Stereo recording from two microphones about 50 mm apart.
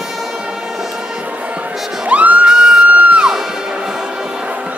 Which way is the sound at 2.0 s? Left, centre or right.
Right.